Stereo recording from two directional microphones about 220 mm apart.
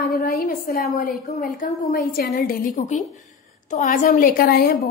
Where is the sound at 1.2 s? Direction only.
40° left (ahead or behind).